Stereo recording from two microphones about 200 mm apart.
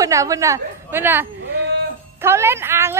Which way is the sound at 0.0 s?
15° right (ahead or behind).